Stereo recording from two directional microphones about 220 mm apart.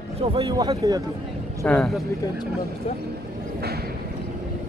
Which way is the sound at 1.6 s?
Centre (ahead or behind).